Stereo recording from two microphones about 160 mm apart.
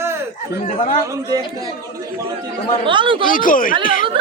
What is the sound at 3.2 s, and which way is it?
Speech, 60° left (ahead or behind).